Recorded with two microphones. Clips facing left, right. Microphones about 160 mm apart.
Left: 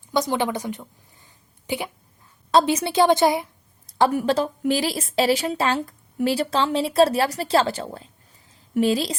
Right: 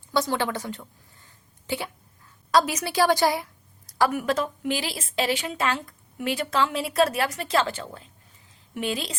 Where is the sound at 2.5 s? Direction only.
25° left (ahead or behind).